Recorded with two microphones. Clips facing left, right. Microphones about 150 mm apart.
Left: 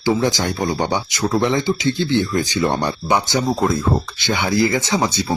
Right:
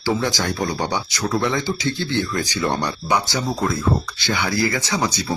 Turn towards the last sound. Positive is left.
turn(degrees=25)  # may be behind; listen again after turning